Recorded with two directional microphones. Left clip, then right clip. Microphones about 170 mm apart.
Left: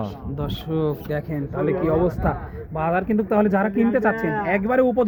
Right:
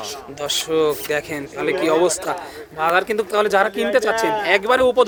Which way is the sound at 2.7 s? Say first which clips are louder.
Right 4 dB; 20° right (ahead or behind).